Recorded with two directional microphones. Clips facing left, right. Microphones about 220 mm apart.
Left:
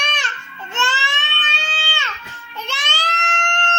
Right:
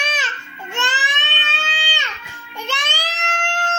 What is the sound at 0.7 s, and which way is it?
Baby cry, 15° right (ahead or behind).